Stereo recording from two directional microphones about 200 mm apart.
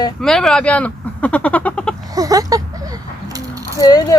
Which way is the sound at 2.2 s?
15° right (ahead or behind).